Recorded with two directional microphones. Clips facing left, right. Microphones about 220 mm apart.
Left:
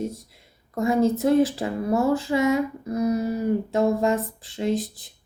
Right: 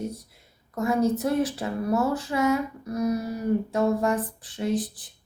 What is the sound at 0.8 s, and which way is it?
Speech, 25° left (ahead or behind).